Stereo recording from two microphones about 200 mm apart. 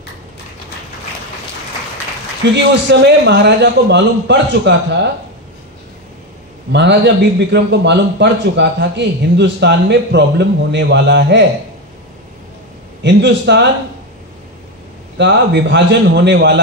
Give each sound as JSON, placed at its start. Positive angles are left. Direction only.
{"t": 2.5, "sound": "a man's voice", "side_deg": -60}
{"t": 6.7, "sound": "a man's voice", "side_deg": -60}
{"t": 13.0, "sound": "a man's voice", "side_deg": -60}
{"t": 15.1, "sound": "a man's voice", "side_deg": -60}